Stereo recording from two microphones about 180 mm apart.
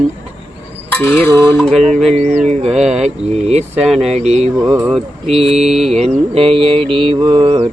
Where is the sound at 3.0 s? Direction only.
35° right (ahead or behind).